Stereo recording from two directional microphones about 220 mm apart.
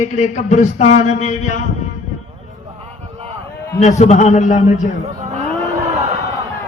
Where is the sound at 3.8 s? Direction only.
30° left (ahead or behind).